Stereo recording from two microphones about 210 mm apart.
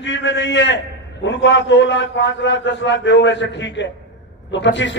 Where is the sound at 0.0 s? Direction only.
60° left (ahead or behind).